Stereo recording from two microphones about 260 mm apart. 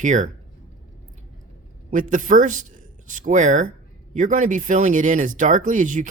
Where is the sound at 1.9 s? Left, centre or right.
Right.